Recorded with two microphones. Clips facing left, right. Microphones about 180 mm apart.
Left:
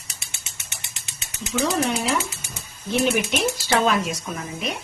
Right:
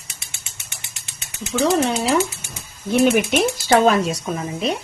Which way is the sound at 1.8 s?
35° right (ahead or behind).